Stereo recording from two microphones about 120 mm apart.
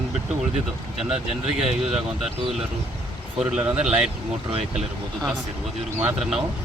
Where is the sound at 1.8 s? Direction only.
5° right (ahead or behind).